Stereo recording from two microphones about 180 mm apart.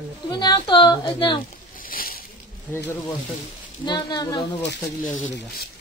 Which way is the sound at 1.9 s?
55° left (ahead or behind).